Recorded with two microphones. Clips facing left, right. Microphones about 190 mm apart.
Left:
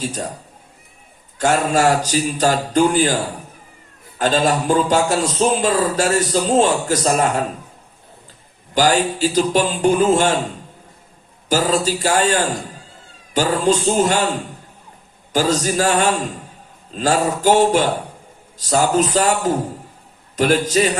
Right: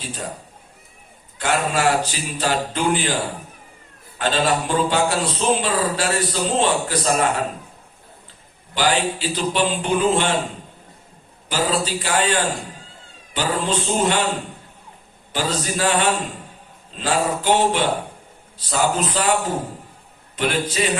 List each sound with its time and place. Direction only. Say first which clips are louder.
1.4 s a man's voice: left 5 dB; 45° left (ahead or behind)
4.2 s a man's voice: left 3 dB; 40° left (ahead or behind)
8.7 s a man's voice: left 4 dB; 45° left (ahead or behind)
11.4 s a man's voice: left 4 dB; 45° left (ahead or behind)
15.3 s a man's voice: left 6 dB; 45° left (ahead or behind)